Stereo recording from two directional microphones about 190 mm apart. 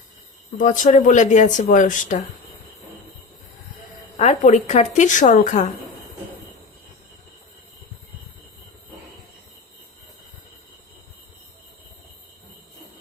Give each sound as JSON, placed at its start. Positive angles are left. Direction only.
{"t": 0.6, "sound": "speech", "side_deg": 40}
{"t": 4.2, "sound": "speech", "side_deg": 35}